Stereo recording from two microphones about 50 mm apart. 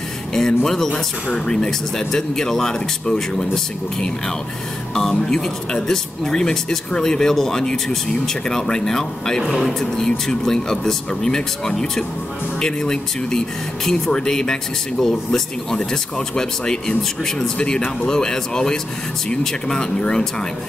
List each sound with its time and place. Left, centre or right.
0.3 s speech: centre